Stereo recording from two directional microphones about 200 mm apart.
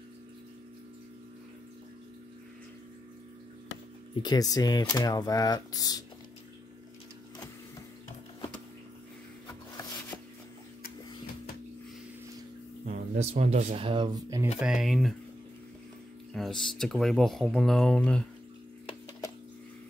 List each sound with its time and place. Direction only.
4.1 s speech: 20° left (ahead or behind)
12.8 s speech: 30° right (ahead or behind)
13.8 s speech: 25° right (ahead or behind)
14.6 s speech: 5° right (ahead or behind)
16.3 s speech: centre (ahead or behind)